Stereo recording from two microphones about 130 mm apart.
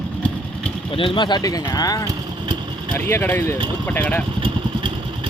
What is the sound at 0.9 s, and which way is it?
Speech, 40° left (ahead or behind).